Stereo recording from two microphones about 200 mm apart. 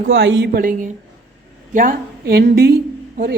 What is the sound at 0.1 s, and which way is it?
A woman's voice, 65° right (ahead or behind).